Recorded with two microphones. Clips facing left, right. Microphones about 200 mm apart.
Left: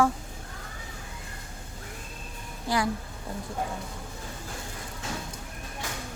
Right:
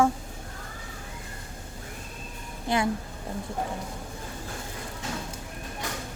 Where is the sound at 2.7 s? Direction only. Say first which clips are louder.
Right 1 dB; 25° right (ahead or behind).